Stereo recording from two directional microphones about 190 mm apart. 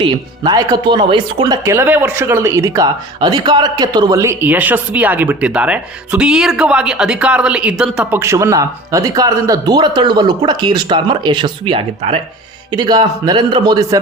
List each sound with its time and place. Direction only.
0.0 s a man's voice: 20° right (ahead or behind)